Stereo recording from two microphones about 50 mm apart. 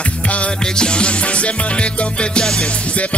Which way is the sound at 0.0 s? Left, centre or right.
Left.